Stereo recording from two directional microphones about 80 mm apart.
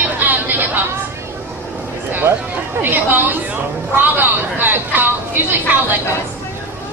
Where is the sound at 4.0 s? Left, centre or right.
Right.